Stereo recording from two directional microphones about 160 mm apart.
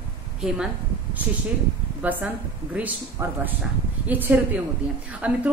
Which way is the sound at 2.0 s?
10° right (ahead or behind).